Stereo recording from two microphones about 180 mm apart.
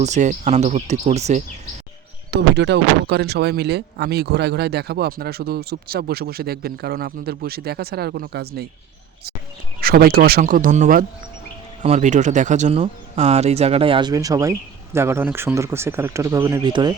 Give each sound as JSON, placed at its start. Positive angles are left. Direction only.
{"t": 0.0, "sound": "speech", "side_deg": -40}
{"t": 2.3, "sound": "speech", "side_deg": -70}
{"t": 9.8, "sound": "a man's voice", "side_deg": -55}